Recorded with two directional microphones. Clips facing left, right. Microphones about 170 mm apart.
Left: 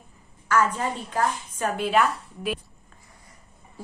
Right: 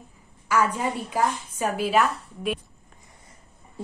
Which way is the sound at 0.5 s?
10° right (ahead or behind).